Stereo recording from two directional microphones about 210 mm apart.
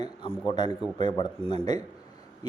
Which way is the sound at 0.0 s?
20° left (ahead or behind).